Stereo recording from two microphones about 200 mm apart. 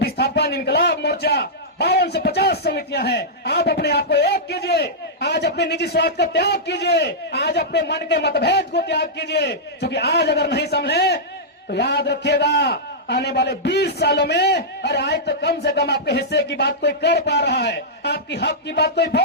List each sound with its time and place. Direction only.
0.0 s a man's voice: 55° left (ahead or behind)